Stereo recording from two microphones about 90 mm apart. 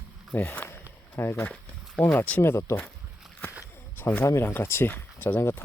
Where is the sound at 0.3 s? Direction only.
20° left (ahead or behind).